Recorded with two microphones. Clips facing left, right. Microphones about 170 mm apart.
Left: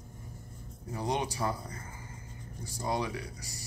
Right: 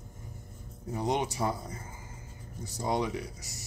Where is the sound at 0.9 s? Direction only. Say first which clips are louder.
Right 2 dB; 20° right (ahead or behind).